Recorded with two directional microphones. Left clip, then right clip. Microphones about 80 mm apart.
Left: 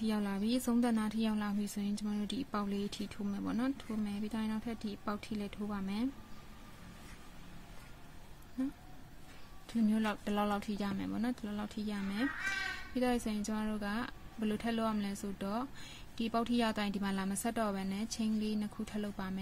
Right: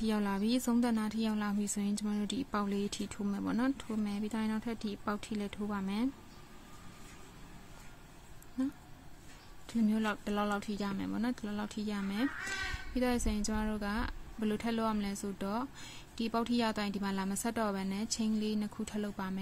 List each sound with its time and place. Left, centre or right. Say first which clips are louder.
0.0 s a woman's voice: right 3 dB; right
0.8 s a woman's voice: even; centre; by 6.0 s right
9.7 s speech: right 1 dB; right
9.9 s speech: right 1 dB; centre
10.9 s a woman's voice: right 2 dB; centre